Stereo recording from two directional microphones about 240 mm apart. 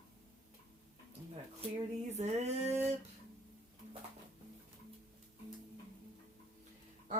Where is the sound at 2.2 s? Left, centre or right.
Right.